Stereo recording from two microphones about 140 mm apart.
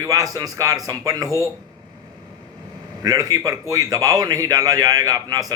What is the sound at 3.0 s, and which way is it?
A man's voice, 25° right (ahead or behind).